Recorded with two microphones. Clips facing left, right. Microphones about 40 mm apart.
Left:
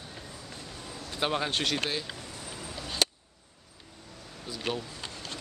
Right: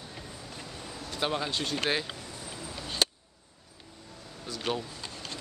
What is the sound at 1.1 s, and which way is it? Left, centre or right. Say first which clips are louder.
Speech: left 1 dB; centre.